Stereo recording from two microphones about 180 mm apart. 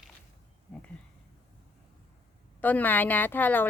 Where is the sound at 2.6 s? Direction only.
10° left (ahead or behind).